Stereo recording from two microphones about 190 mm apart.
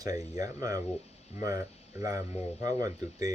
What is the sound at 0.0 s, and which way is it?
Speech, 20° right (ahead or behind).